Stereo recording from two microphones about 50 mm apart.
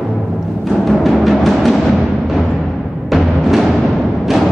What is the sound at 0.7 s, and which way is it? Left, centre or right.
Timpani, centre.